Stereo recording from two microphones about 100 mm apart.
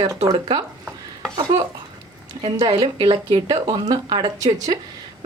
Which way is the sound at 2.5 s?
40° right (ahead or behind).